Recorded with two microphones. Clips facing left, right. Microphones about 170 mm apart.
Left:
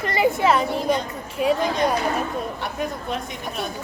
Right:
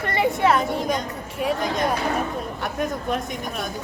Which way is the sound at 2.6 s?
45° right (ahead or behind).